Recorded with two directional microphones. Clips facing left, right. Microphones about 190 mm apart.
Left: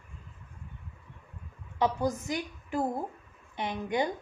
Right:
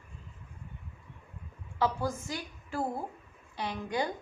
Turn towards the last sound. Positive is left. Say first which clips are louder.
# left 3 dB
turn(degrees=20)  # may be behind; listen again after turning